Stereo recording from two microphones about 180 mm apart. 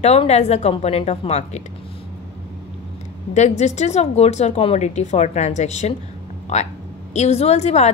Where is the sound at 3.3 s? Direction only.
40° left (ahead or behind).